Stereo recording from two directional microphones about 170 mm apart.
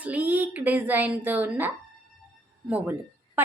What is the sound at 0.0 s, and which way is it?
Speech, 10° right (ahead or behind).